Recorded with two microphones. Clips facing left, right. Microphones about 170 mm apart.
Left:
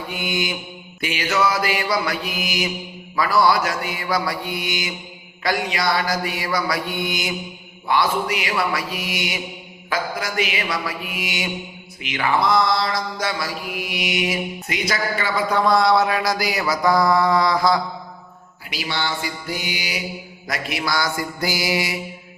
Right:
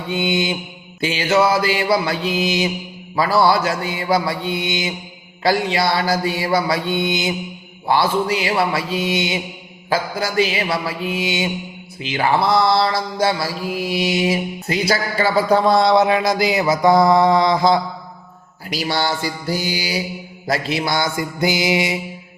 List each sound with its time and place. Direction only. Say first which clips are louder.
0.1 s mantra: right 7 dB; 25° right (ahead or behind)
18.7 s mantra: right 5 dB; 40° right (ahead or behind); by 22.0 s 20° right (ahead or behind)